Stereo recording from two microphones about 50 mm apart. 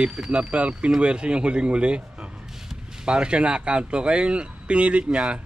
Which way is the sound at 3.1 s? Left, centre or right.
Centre.